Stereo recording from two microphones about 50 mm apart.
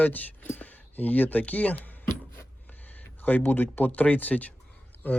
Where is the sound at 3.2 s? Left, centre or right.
Left.